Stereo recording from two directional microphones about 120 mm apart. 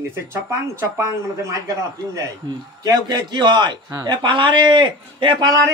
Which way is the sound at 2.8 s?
35° right (ahead or behind).